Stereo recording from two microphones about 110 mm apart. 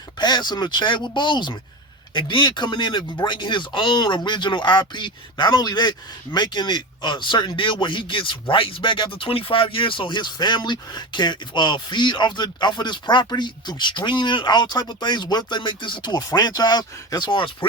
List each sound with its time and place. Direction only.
0.2 s speech: 40° left (ahead or behind)